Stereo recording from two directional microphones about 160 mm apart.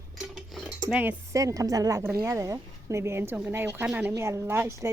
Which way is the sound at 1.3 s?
20° right (ahead or behind).